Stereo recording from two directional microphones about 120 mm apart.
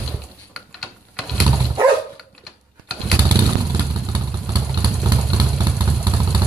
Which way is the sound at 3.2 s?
35° right (ahead or behind).